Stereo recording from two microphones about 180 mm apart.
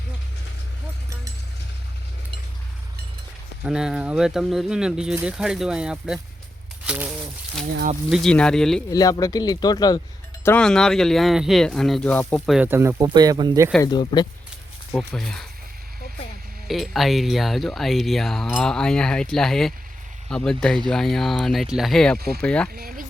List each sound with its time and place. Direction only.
3.6 s speech: 5° right (ahead or behind)
8.1 s speech: 5° left (ahead or behind)
8.9 s speech: 20° left (ahead or behind)
10.4 s speech: 5° left (ahead or behind)
12.5 s speech: 10° right (ahead or behind)
13.8 s speech: 25° left (ahead or behind)
14.9 s speech: centre (ahead or behind)
16.6 s speech: centre (ahead or behind)
22.7 s speech: 55° right (ahead or behind)